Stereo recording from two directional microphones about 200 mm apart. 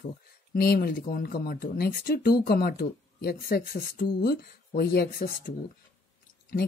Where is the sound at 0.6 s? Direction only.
50° left (ahead or behind).